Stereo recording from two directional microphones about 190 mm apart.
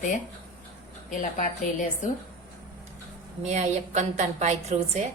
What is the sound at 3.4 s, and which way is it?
A woman's voice, 40° right (ahead or behind).